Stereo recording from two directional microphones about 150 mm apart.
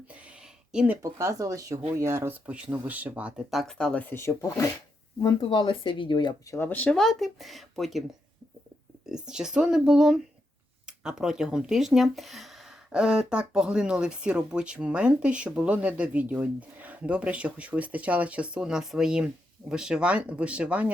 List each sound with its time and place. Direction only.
0.1 s a sound: 10° right (ahead or behind)
1.0 s speech: 20° right (ahead or behind); by 4.6 s 20° left (ahead or behind)
5.2 s speech: 35° left (ahead or behind)
6.6 s speech: 10° left (ahead or behind)
9.0 s speech: 5° right (ahead or behind)